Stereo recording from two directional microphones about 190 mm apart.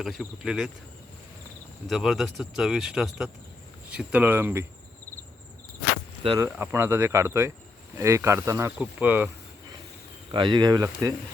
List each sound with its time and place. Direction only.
0.0 s speech: centre (ahead or behind)
1.9 s speech: centre (ahead or behind)
6.2 s speech: 20° right (ahead or behind)
10.3 s speech: 25° right (ahead or behind)